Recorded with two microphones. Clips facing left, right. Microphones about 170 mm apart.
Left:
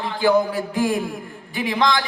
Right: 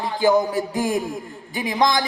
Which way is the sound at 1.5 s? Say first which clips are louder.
Even; 15° right (ahead or behind).